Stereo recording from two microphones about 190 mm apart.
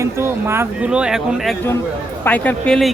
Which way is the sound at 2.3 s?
5° left (ahead or behind).